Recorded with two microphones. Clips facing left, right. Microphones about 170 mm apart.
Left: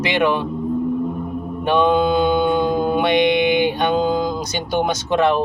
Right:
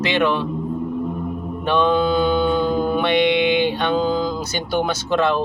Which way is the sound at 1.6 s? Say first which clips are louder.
Left 2 dB; 15° left (ahead or behind).